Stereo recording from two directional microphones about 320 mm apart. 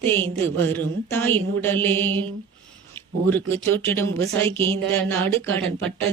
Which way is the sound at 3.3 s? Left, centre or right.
Centre.